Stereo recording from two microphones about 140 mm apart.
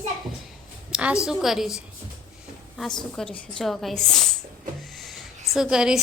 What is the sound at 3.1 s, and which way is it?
A woman's voice, 5° left (ahead or behind).